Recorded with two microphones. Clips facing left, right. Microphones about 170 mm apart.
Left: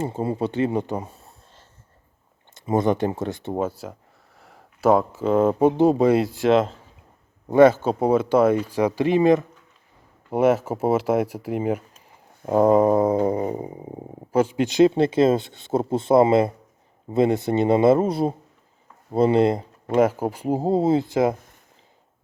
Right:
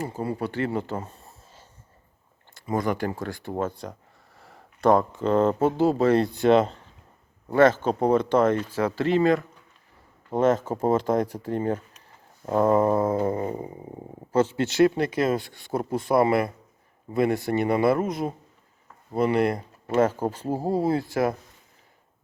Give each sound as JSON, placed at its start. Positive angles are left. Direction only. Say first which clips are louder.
{"t": 0.0, "sound": "speech", "louder": "left 4 dB", "side_deg": 25}
{"t": 1.1, "sound": "a sound", "louder": "even", "side_deg": 0}
{"t": 2.6, "sound": "speech", "louder": "left 5 dB", "side_deg": 25}
{"t": 3.6, "sound": "speech", "louder": "even", "side_deg": 5}
{"t": 7.5, "sound": "dog", "louder": "left 4 dB", "side_deg": 10}
{"t": 17.1, "sound": "speech", "louder": "left 3 dB", "side_deg": 25}
{"t": 20.0, "sound": "speech", "louder": "left 3 dB", "side_deg": 10}